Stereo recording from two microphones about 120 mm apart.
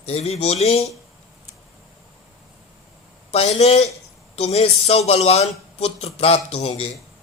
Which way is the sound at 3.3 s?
60° left (ahead or behind).